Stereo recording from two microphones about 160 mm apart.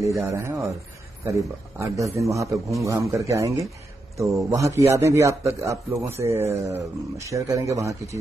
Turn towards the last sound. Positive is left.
turn(degrees=-20)  # may be behind; listen again after turning